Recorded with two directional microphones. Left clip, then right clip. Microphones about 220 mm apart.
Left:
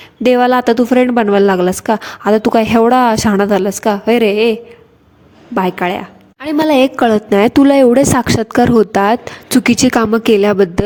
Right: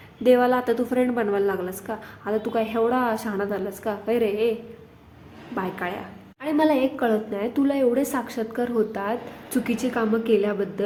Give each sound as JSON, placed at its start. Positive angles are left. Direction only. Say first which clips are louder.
{"t": 0.3, "sound": "a woman's voice", "louder": "left 9 dB", "side_deg": 40}
{"t": 5.5, "sound": "a woman's voice", "louder": "left 14 dB", "side_deg": 40}
{"t": 6.4, "sound": "a woman's voice", "louder": "left 7 dB", "side_deg": 20}
{"t": 6.7, "sound": "a woman's voice", "louder": "left 14 dB", "side_deg": 40}